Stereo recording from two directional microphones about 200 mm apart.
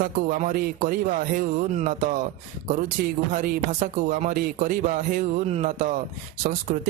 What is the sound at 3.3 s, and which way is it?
Speech, 40° right (ahead or behind).